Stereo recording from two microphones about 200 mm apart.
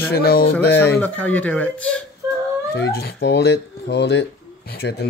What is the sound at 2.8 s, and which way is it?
Speech, 55° left (ahead or behind).